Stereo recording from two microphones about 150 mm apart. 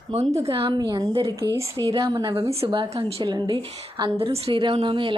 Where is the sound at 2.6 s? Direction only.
35° right (ahead or behind).